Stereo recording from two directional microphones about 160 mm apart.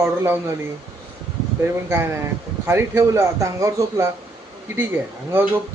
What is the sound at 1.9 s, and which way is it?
Speech, 15° right (ahead or behind).